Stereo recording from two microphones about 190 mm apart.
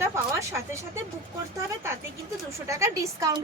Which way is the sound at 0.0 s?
15° right (ahead or behind).